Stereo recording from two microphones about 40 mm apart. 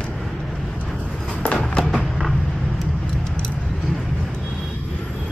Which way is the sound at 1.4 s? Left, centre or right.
Left.